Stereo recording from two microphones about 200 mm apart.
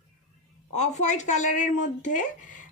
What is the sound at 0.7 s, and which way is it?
Speech, 35° left (ahead or behind).